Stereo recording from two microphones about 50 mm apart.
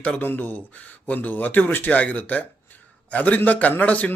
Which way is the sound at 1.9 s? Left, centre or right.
Left.